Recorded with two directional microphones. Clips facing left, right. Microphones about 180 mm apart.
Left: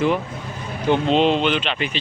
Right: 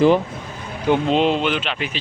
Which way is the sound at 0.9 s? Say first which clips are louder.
Even; 5° right (ahead or behind).